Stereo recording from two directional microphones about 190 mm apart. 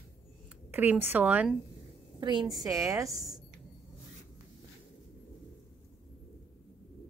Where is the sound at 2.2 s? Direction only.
25° right (ahead or behind).